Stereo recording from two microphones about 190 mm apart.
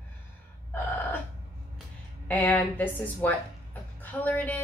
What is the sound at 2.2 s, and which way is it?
A woman's voice, 10° left (ahead or behind).